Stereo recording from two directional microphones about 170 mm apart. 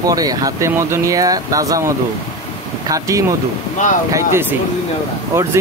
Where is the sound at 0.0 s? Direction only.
20° right (ahead or behind).